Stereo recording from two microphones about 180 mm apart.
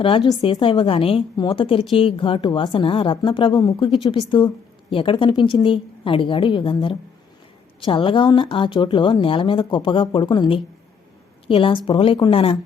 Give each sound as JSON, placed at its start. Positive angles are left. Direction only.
{"t": 0.0, "sound": "speech", "side_deg": 30}